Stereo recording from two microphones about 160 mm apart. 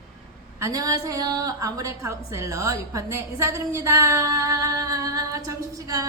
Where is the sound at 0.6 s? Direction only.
20° right (ahead or behind).